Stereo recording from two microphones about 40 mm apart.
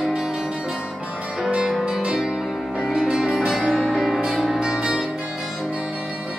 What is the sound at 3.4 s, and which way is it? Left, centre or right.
Music, centre.